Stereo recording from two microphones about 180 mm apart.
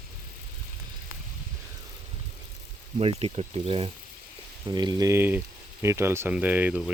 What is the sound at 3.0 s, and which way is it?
Speech, 35° right (ahead or behind).